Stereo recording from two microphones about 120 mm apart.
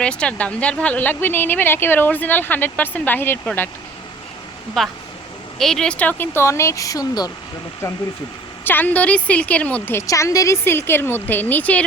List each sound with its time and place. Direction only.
0.0 s speech: 10° left (ahead or behind)
4.8 s a woman's voice: 5° left (ahead or behind); by 7.3 s 30° left (ahead or behind)
8.6 s speech: 15° left (ahead or behind)
10.1 s a woman's voice: 25° left (ahead or behind)